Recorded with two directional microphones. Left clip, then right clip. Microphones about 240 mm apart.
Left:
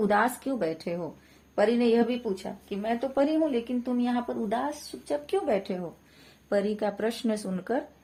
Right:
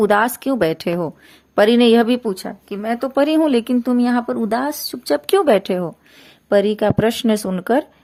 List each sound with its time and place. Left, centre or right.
0.1 s speech: right